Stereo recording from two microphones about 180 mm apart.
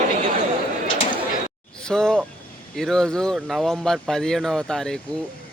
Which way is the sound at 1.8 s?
5° left (ahead or behind).